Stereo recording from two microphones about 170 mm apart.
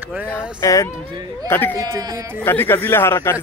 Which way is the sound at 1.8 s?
20° right (ahead or behind).